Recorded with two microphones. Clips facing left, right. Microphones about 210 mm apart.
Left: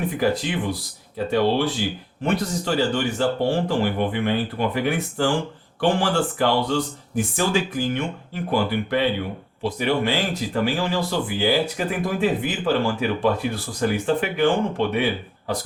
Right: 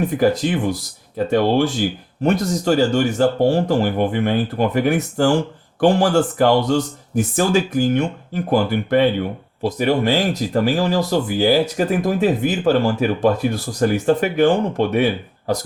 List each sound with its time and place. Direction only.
0.1 s speech: 45° right (ahead or behind)